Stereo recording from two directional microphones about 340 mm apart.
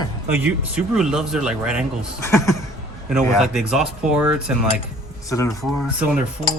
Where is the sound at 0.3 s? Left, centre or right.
Centre.